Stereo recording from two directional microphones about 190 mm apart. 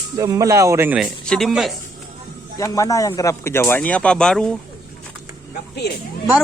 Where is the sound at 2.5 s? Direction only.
15° left (ahead or behind).